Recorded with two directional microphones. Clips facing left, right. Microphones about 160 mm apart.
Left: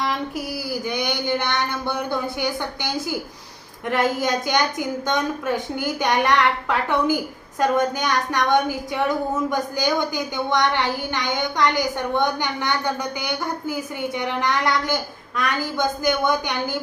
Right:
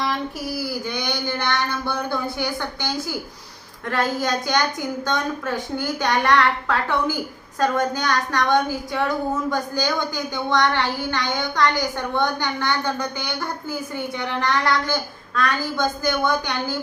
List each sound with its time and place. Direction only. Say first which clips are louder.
0.9 s a woman's voice: left 3 dB; 20° left (ahead or behind)